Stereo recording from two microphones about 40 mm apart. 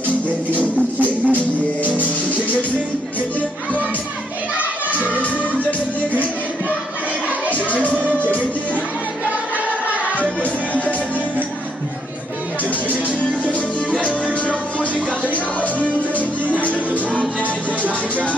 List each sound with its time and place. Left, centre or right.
1.2 s music: right
3.2 s music: left
5.0 s music: left
7.5 s music: left
9.8 s music: right
13.5 s music: left
15.3 s music: left
17.8 s music: right